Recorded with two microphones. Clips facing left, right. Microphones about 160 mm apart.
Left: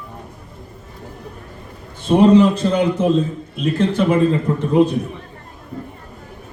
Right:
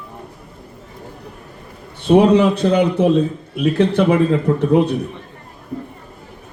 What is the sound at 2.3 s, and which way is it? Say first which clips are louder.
Speech: left 1 dB; 65° right (ahead or behind).